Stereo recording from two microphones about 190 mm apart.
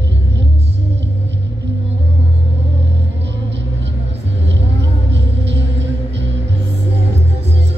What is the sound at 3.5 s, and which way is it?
Music, 65° right (ahead or behind).